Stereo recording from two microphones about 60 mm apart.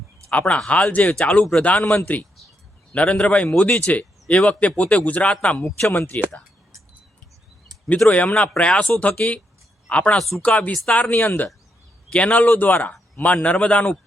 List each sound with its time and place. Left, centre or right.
0.3 s speech: left
5.9 s speech: left
8.1 s speech: left
9.9 s speech: left
10.2 s speech: centre
10.4 s speech: left